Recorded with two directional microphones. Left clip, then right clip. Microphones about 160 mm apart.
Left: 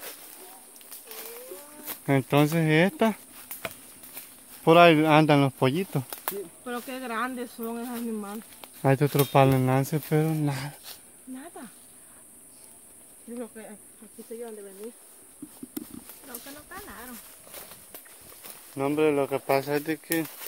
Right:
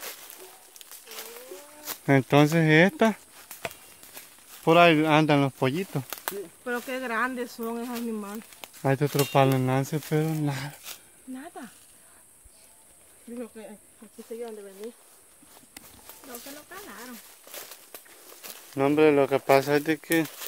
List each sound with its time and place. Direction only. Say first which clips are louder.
2.0 s speech: right 3 dB; 25° right (ahead or behind)
3.6 s a sound: right 1 dB; 15° left (ahead or behind)
4.6 s speech: left 2 dB; 35° left (ahead or behind)
6.0 s speech: right 1 dB; 5° right (ahead or behind)
8.8 s speech: left 2 dB; 45° left (ahead or behind)
9.2 s speech: left 1 dB; 35° left (ahead or behind); by 10.8 s 20° left (ahead or behind)
11.3 s a sound: right 2 dB; 30° left (ahead or behind)
13.4 s speech: even; 35° left (ahead or behind)
16.7 s speech: left 1 dB; 5° left (ahead or behind)
17.5 s walk: right 3 dB; 5° right (ahead or behind)
18.8 s speech: right 4 dB; 65° right (ahead or behind); by 20.2 s 45° right (ahead or behind)